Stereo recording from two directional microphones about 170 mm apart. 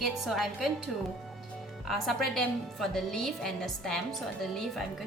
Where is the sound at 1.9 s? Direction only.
Centre (ahead or behind).